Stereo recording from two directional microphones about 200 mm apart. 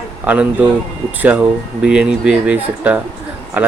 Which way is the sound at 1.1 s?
10° right (ahead or behind).